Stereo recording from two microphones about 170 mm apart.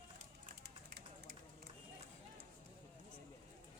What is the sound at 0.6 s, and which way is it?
Run, 70° right (ahead or behind).